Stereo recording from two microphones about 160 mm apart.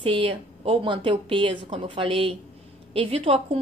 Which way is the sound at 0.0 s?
35° right (ahead or behind).